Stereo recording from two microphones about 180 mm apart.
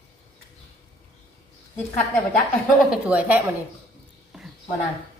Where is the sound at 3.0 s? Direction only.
5° right (ahead or behind).